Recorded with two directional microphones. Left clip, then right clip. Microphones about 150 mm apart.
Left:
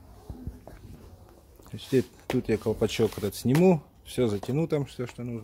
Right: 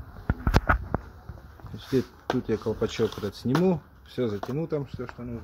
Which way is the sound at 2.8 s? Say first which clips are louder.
Left 1 dB; 20° left (ahead or behind).